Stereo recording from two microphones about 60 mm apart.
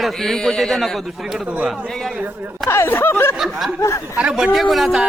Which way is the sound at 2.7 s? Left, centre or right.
Left.